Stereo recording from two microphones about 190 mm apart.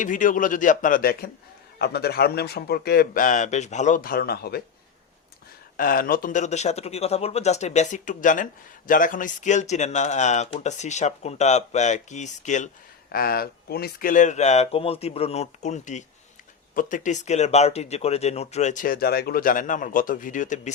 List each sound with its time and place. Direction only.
0.0 s speech: 45° left (ahead or behind)
5.7 s speech: 50° left (ahead or behind)
13.1 s speech: 50° left (ahead or behind)